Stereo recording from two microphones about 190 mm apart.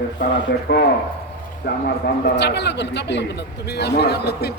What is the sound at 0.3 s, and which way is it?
Speech, 60° left (ahead or behind).